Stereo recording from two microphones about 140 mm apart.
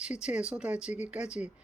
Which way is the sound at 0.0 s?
5° right (ahead or behind).